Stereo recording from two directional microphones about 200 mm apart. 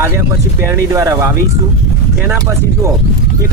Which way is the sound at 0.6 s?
15° right (ahead or behind).